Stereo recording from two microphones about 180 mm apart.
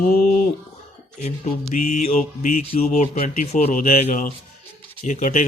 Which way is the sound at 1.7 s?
45° left (ahead or behind).